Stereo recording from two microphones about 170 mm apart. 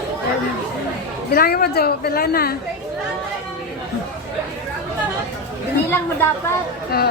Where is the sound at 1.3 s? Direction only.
60° left (ahead or behind).